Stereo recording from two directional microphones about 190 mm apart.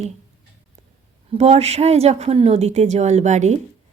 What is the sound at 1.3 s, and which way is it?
Speech, 35° right (ahead or behind).